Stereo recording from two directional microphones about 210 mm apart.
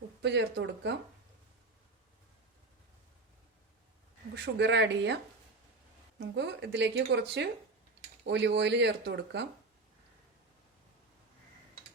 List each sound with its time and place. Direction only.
0.2 s speech: 55° right (ahead or behind)
4.5 s speech: 55° right (ahead or behind)